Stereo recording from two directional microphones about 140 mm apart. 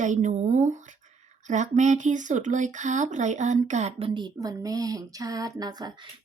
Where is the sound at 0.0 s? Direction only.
60° right (ahead or behind).